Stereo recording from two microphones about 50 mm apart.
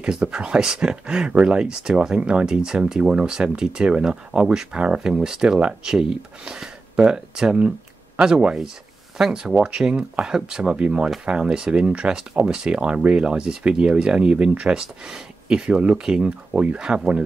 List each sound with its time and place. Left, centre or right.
0.0 s speech: centre